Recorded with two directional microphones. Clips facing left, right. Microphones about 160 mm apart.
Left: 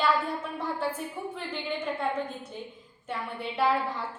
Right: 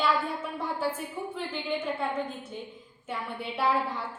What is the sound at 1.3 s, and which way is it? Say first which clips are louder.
Speech: right 1 dB; centre (ahead or behind).